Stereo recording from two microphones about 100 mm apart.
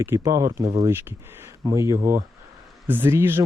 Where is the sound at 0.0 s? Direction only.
35° right (ahead or behind).